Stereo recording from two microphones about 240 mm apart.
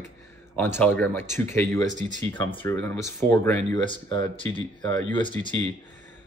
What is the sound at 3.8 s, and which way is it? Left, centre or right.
A man's voice, centre.